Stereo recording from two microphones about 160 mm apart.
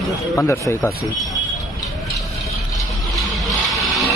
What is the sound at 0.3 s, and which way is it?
Speech, 20° left (ahead or behind).